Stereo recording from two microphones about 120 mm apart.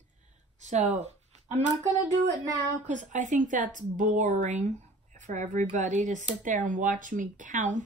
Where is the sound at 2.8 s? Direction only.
90° right.